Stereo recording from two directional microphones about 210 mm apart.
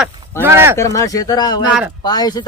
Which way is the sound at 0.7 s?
15° left (ahead or behind).